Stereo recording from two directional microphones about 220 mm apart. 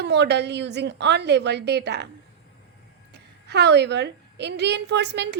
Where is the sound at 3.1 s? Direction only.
50° right (ahead or behind).